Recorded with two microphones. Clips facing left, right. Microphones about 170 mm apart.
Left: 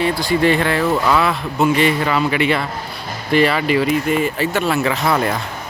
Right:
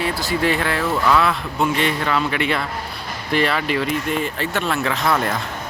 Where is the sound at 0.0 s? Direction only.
5° right (ahead or behind).